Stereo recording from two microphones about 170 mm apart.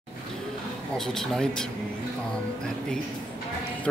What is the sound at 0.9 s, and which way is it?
Speech, 5° left (ahead or behind).